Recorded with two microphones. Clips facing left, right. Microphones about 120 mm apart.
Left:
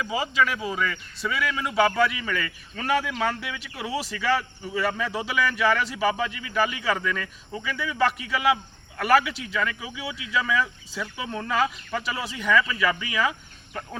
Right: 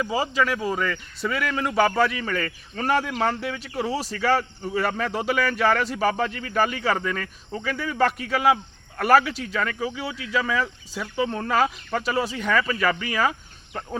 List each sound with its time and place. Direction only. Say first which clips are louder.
0.0 s a man's voice: right 1 dB; 35° right (ahead or behind)